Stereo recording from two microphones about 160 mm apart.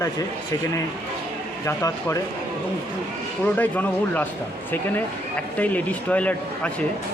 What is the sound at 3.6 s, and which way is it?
Speech, 10° left (ahead or behind).